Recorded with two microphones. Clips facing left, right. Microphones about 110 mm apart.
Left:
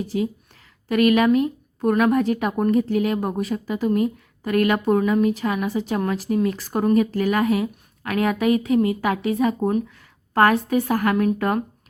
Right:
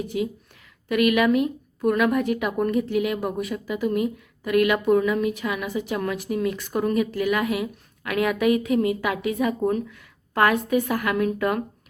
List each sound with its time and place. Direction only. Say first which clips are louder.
0.1 s a woman's voice: left 4 dB; 35° left (ahead or behind)
9.9 s a woman's voice: left 5 dB; 35° left (ahead or behind)